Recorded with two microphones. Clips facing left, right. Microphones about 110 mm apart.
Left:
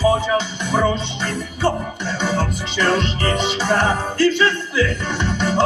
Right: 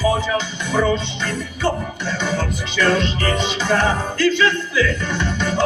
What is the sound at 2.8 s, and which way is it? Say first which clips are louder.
Music: right 1 dB; 20° left (ahead or behind).